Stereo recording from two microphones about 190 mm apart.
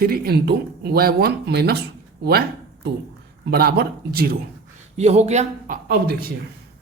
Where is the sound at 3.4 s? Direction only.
55° right (ahead or behind).